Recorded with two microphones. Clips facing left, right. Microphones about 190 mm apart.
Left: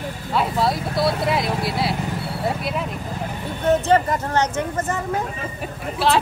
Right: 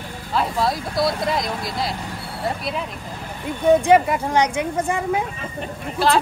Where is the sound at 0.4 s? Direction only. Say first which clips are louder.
Left 1 dB; centre (ahead or behind).